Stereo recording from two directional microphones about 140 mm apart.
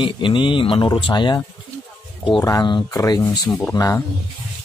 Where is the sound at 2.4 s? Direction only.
25° left (ahead or behind).